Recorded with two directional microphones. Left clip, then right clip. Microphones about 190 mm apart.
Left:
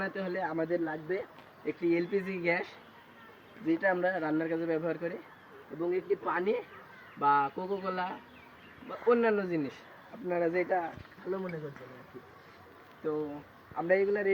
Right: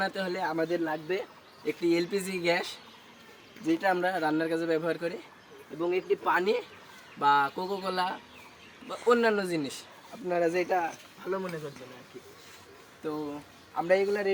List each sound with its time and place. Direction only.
0.0 s speech: 15° right (ahead or behind)
3.7 s speech: 10° right (ahead or behind)
13.7 s speech: 15° right (ahead or behind)